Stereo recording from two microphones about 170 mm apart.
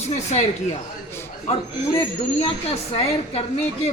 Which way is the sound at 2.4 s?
35° left (ahead or behind).